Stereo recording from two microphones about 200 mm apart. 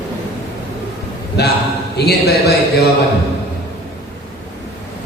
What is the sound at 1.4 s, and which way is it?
Speech, 55° left (ahead or behind).